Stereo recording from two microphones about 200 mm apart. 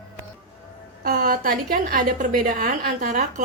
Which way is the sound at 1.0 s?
45° right (ahead or behind).